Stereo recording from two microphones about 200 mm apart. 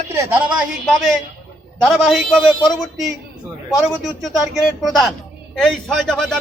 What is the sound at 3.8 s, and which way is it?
Speech, centre (ahead or behind).